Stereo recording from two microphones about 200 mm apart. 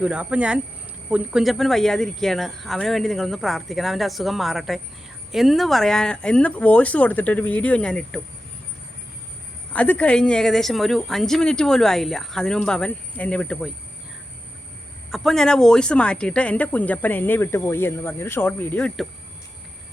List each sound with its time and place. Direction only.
0.0 s speech: 5° right (ahead or behind)
9.7 s speech: 5° left (ahead or behind)
15.1 s speech: centre (ahead or behind)